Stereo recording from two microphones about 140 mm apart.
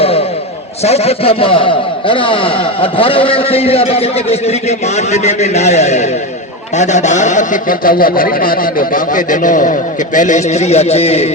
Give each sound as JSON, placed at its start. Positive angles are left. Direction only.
{"t": 0.9, "sound": "a man's voice", "side_deg": 45}